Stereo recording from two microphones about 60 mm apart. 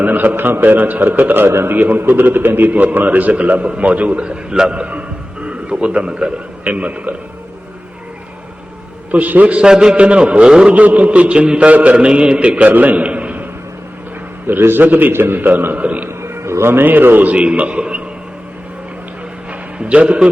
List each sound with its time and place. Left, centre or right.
0.0 s a man's voice: right
9.1 s a man's voice: right
14.4 s a man's voice: right
16.0 s music: right
17.3 s a man's voice: centre
19.5 s a sound: right